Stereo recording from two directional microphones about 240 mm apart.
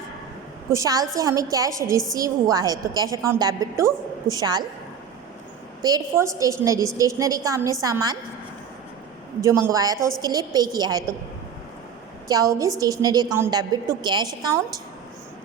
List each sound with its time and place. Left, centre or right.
0.7 s a woman's voice: centre
5.8 s a woman's voice: centre
9.4 s a woman's voice: centre
12.3 s a woman's voice: centre